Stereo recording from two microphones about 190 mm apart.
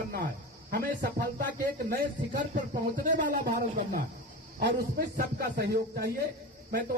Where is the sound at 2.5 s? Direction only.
45° right (ahead or behind).